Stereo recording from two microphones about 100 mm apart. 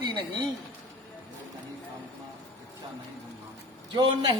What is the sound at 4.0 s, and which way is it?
Speech, 55° right (ahead or behind).